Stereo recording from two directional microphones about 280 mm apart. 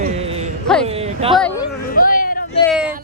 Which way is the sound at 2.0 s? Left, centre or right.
Left.